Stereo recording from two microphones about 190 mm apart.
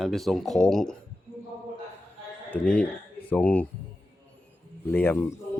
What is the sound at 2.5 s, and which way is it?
Speech, 5° left (ahead or behind).